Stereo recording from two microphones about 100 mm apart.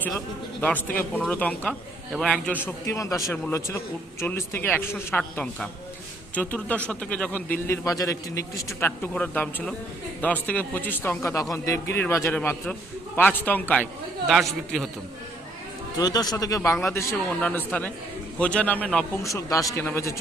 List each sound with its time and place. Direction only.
0.6 s a man's voice: 15° left (ahead or behind)
2.8 s a man's voice: 35° left (ahead or behind)
4.3 s speech: 20° left (ahead or behind)
6.3 s a man's voice: 15° left (ahead or behind)
7.9 s a man's voice: 35° left (ahead or behind)
9.1 s a man's voice: 15° left (ahead or behind)
14.3 s a man's voice: centre (ahead or behind)
16.0 s a man's voice: 40° left (ahead or behind)
17.4 s a man's voice: 15° left (ahead or behind)
19.2 s a man's voice: 35° left (ahead or behind)